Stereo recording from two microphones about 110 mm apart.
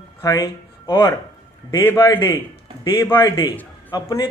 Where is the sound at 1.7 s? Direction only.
25° left (ahead or behind).